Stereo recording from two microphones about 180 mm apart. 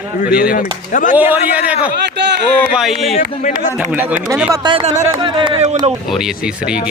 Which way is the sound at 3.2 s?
45° left (ahead or behind).